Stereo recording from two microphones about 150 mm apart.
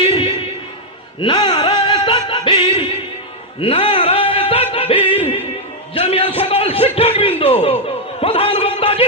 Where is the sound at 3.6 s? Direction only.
40° left (ahead or behind).